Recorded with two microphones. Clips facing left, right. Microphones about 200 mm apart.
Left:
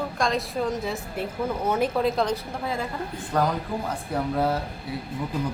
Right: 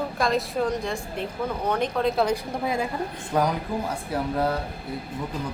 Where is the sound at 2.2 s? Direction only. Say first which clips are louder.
Right 2 dB; 15° right (ahead or behind).